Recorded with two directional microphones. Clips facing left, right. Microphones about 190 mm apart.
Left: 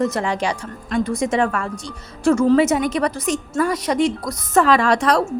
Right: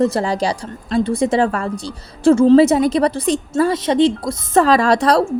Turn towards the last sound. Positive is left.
turn(degrees=-35)  # may be behind; listen again after turning